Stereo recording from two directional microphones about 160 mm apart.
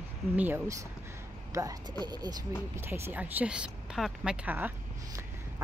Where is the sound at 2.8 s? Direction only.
10° right (ahead or behind).